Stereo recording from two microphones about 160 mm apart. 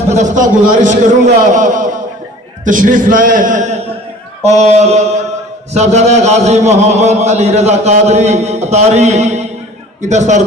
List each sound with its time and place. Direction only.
0.1 s a man's voice: 50° right (ahead or behind)